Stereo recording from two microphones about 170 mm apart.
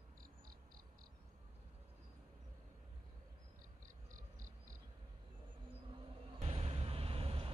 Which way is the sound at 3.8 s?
50° right (ahead or behind).